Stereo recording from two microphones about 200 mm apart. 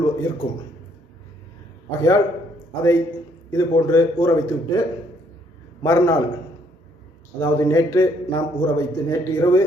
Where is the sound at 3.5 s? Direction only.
15° left (ahead or behind).